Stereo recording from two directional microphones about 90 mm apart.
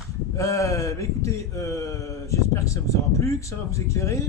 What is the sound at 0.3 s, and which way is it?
Speech, 35° left (ahead or behind).